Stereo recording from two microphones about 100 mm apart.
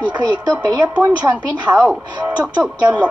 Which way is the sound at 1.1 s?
15° right (ahead or behind).